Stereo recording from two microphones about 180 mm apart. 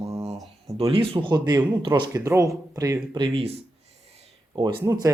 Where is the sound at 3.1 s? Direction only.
30° right (ahead or behind).